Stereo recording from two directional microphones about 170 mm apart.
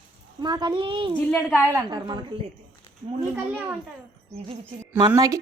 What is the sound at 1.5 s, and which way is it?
Speech, 15° right (ahead or behind).